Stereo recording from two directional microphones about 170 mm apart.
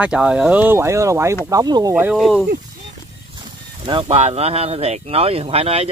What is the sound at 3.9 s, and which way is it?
Speech, 30° right (ahead or behind).